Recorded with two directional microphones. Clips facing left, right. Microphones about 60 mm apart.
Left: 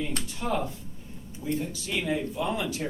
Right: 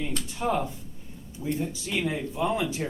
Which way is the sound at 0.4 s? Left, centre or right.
Right.